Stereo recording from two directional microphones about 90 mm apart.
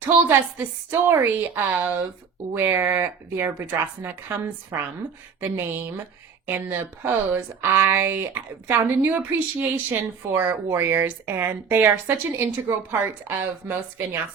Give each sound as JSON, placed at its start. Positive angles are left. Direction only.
{"t": 0.0, "sound": "speech", "side_deg": -20}